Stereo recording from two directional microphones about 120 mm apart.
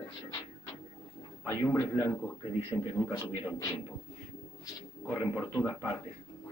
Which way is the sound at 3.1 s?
25° left (ahead or behind).